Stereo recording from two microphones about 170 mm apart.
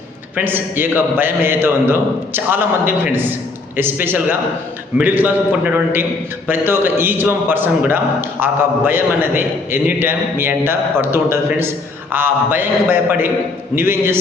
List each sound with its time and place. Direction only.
0.3 s a man's voice: 10° right (ahead or behind)